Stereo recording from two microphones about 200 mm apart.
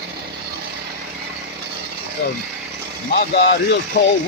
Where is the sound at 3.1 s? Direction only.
55° left (ahead or behind).